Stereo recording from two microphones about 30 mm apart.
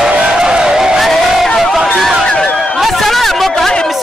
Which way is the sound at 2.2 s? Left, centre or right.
Left.